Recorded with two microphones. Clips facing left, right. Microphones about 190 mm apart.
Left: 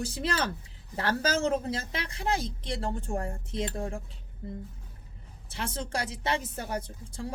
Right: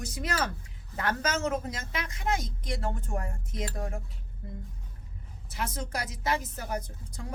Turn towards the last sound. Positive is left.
turn(degrees=30)  # may be behind; listen again after turning